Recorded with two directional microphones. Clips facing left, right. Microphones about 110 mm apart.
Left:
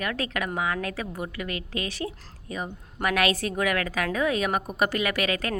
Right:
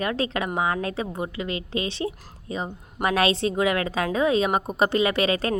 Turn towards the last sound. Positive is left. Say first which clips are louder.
# right 4 dB
turn(degrees=-30)  # may be behind; listen again after turning